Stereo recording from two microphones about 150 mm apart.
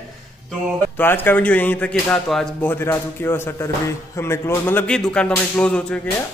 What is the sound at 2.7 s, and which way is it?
Speech, 15° left (ahead or behind).